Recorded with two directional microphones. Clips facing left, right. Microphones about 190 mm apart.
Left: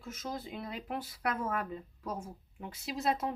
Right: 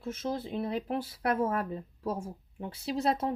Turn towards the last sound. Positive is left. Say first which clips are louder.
# right 4 dB
turn(degrees=-30)  # may be behind; listen again after turning